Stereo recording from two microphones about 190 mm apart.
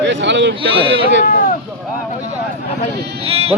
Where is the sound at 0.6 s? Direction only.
30° right (ahead or behind).